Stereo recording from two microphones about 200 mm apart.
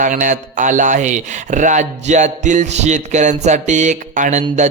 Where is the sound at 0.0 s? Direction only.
40° right (ahead or behind).